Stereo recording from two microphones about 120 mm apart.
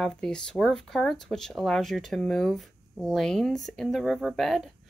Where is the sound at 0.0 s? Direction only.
5° left (ahead or behind).